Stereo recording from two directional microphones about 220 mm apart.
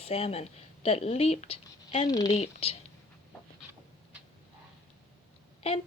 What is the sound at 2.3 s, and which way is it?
Speech, 30° left (ahead or behind).